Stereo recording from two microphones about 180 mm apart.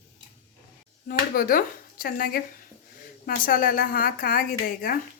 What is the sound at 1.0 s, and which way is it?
A woman's voice, 55° left (ahead or behind).